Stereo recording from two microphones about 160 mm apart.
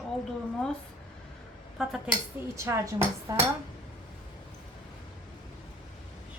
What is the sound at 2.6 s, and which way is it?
Dishes, 20° right (ahead or behind).